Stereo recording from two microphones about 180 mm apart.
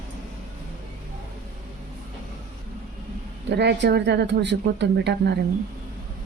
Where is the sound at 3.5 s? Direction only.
70° right (ahead or behind).